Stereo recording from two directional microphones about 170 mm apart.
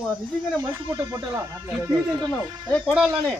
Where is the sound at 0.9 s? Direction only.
15° right (ahead or behind).